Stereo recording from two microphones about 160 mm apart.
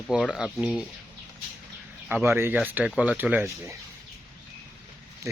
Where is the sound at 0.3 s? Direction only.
5° right (ahead or behind).